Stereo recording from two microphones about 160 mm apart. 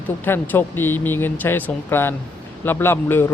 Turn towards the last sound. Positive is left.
turn(degrees=15)  # may be behind; listen again after turning